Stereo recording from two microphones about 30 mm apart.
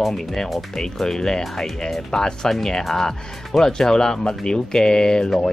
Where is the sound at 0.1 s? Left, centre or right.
Centre.